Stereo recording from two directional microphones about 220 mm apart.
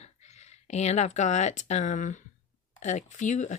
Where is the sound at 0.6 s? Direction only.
30° left (ahead or behind).